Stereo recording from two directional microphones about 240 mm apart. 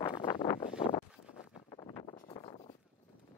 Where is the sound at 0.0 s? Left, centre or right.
Centre.